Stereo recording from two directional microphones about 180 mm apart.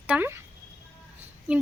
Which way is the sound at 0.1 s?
10° right (ahead or behind).